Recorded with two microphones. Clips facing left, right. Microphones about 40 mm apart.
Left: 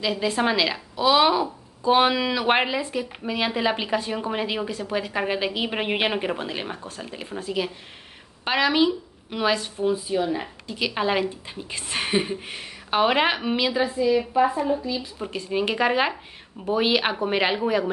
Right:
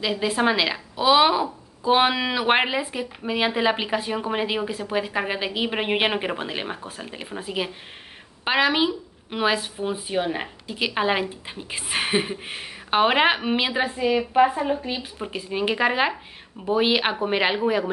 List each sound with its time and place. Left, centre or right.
0.0 s a woman's voice: centre
9.9 s speech: right
10.7 s a woman's voice: centre
13.8 s speech: right
15.1 s a woman's voice: centre